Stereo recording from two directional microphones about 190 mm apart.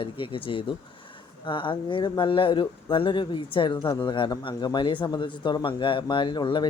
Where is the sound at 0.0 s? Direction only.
25° left (ahead or behind).